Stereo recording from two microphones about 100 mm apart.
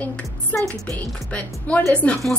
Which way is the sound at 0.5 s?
20° left (ahead or behind).